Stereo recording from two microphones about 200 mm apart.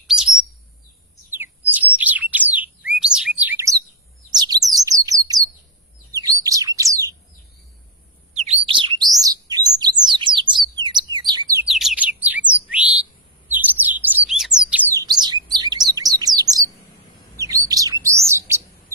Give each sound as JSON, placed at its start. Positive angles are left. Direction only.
{"t": 0.1, "sound": "chirp", "side_deg": -5}
{"t": 1.4, "sound": "bird", "side_deg": -10}
{"t": 2.8, "sound": "chirp", "side_deg": -5}
{"t": 4.3, "sound": "chirp", "side_deg": -20}
{"t": 4.9, "sound": "bird", "side_deg": -15}
{"t": 6.1, "sound": "bird", "side_deg": -15}
{"t": 8.3, "sound": "bird", "side_deg": -35}
{"t": 11.7, "sound": "bird", "side_deg": 0}
{"t": 13.5, "sound": "chirp", "side_deg": -10}
{"t": 14.7, "sound": "bird", "side_deg": -10}
{"t": 15.0, "sound": "chirp", "side_deg": -20}
{"t": 18.0, "sound": "bird", "side_deg": -15}